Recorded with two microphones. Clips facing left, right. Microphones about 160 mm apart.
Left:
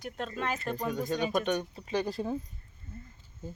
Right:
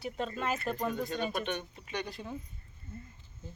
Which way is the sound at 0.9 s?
45° left (ahead or behind).